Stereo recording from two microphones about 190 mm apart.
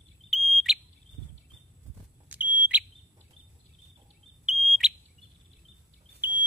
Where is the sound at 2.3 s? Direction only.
10° right (ahead or behind).